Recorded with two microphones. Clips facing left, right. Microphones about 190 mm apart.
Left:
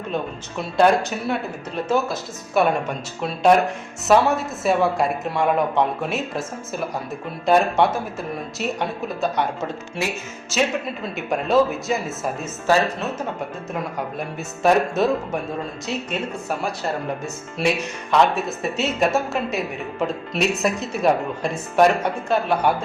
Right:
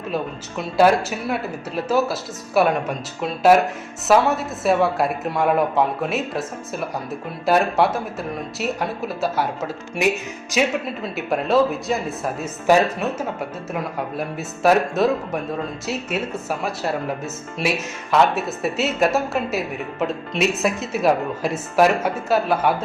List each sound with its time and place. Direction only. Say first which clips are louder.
0.8 s speech: right 1 dB; 5° right (ahead or behind)
10.0 s music: right 6 dB; 20° right (ahead or behind)
10.5 s speech: right 1 dB; 15° right (ahead or behind)
11.0 s speech: right 1 dB; centre (ahead or behind)
12.6 s speech: right 3 dB; 15° right (ahead or behind)
13.7 s speech: right 2 dB; centre (ahead or behind)